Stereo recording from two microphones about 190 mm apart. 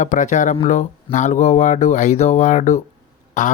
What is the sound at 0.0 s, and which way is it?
Speech, 40° left (ahead or behind).